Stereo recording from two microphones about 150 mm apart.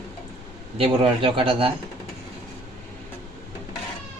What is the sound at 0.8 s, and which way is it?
Speech, 35° right (ahead or behind).